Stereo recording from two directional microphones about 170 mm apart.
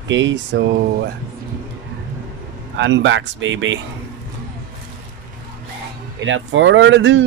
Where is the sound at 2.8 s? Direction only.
90° right.